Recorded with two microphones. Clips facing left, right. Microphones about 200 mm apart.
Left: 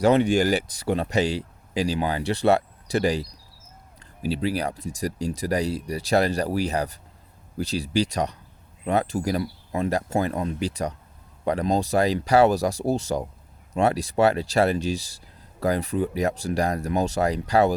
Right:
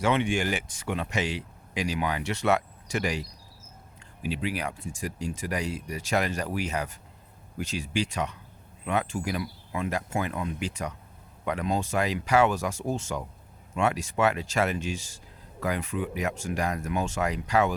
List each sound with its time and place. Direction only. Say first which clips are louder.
0.0 s speech: left 7 dB; 40° left (ahead or behind)